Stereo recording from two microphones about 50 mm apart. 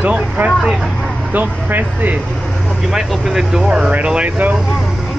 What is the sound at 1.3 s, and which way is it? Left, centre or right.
Speech, right.